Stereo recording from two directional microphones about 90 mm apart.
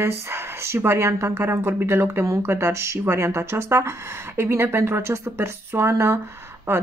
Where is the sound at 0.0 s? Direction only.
30° right (ahead or behind).